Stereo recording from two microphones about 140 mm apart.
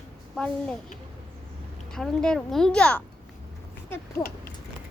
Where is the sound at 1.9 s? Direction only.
5° left (ahead or behind).